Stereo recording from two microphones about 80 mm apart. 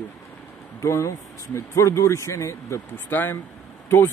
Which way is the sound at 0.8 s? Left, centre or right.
Left.